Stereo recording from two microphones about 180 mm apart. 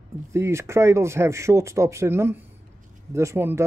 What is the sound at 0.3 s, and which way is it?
Speech, 15° right (ahead or behind).